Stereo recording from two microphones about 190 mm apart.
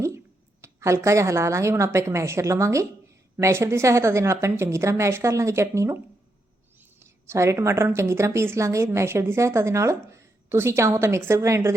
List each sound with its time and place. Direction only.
0.6 s a woman's voice: 15° right (ahead or behind)